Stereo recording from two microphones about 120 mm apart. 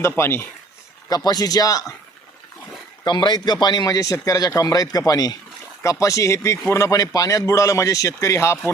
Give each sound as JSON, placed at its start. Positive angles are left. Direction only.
{"t": 0.0, "sound": "speech", "side_deg": 20}
{"t": 1.1, "sound": "speech", "side_deg": 35}
{"t": 3.0, "sound": "speech", "side_deg": 35}